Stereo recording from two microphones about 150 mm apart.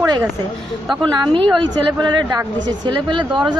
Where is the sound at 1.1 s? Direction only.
30° right (ahead or behind).